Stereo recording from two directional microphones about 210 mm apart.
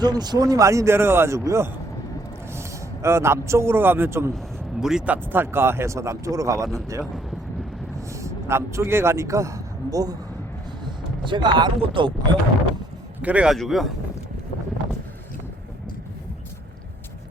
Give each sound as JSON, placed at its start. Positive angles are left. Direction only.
{"t": 0.0, "sound": "a man's voice", "side_deg": -20}
{"t": 8.1, "sound": "speech", "side_deg": -15}
{"t": 11.3, "sound": "speech", "side_deg": -20}
{"t": 13.2, "sound": "a man's voice", "side_deg": -5}